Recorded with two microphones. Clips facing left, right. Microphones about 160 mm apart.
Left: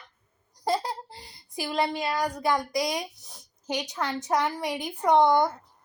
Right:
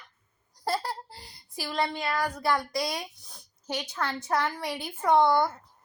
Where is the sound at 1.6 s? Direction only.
20° left (ahead or behind).